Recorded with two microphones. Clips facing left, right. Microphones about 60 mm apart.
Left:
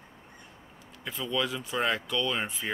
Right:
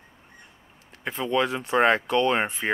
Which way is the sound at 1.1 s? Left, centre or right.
Right.